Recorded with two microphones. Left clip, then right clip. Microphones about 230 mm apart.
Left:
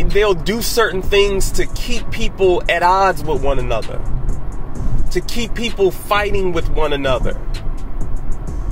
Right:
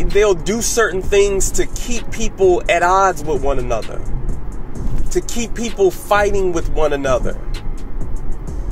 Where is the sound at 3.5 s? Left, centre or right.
Centre.